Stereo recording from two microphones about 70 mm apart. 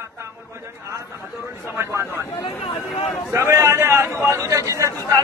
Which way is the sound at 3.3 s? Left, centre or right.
Right.